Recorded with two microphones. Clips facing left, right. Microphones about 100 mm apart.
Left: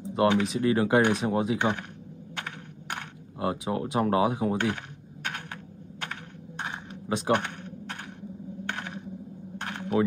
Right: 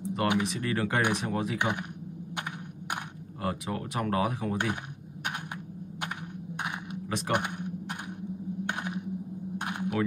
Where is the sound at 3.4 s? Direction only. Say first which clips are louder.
Left 4 dB; 25° left (ahead or behind).